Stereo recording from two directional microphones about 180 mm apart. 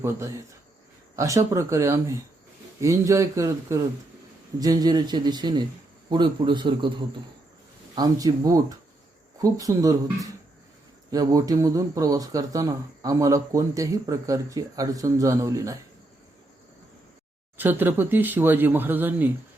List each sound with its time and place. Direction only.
0.0 s speech: 15° right (ahead or behind)
7.9 s speech: 20° right (ahead or behind)
17.6 s speech: 10° right (ahead or behind)